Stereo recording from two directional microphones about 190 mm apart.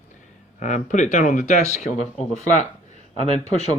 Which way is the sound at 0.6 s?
40° left (ahead or behind).